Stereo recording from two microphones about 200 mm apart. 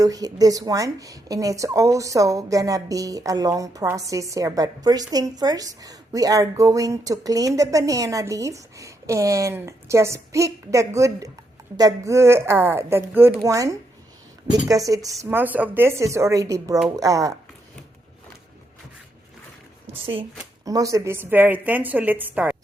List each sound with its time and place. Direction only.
0.0 s a woman's voice: 20° right (ahead or behind)
20.0 s speech: 25° right (ahead or behind)
20.7 s a woman's voice: 15° right (ahead or behind)